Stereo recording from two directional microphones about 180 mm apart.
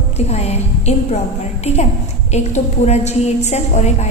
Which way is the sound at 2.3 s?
40° left (ahead or behind).